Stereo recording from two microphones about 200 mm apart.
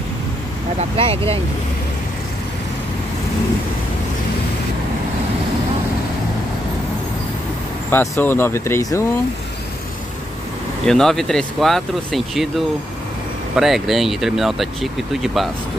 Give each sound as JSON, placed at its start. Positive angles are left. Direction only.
{"t": 0.7, "sound": "speech", "side_deg": -30}
{"t": 7.9, "sound": "speech", "side_deg": 10}
{"t": 10.9, "sound": "speech", "side_deg": 0}